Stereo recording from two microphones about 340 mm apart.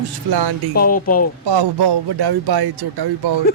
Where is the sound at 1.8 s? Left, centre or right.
Right.